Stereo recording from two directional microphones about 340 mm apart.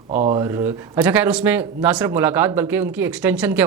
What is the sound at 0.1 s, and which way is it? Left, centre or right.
Speech, right.